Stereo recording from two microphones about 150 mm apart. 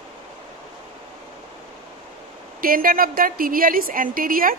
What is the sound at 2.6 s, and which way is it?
A woman's voice, 70° right (ahead or behind).